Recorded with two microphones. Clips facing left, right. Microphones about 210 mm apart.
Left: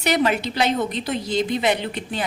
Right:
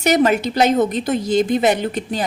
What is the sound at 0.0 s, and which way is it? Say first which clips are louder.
A woman's voice: right 5 dB; 45° right (ahead or behind).